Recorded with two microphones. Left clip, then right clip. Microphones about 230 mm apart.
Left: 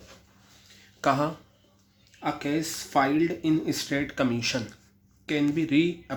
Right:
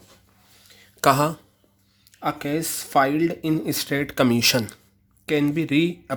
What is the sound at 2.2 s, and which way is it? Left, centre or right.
Speech, right.